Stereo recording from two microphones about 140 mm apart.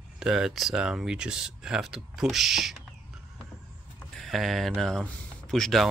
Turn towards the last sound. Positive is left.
turn(degrees=0)  # may be behind; listen again after turning